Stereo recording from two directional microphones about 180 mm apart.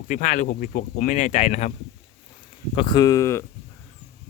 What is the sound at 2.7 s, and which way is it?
Speech, 25° left (ahead or behind).